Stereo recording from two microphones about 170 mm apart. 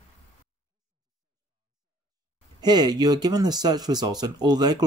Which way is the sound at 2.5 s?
25° right (ahead or behind).